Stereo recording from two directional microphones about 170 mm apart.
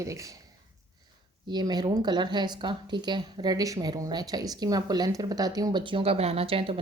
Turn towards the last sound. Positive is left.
turn(degrees=-35)  # may be behind; listen again after turning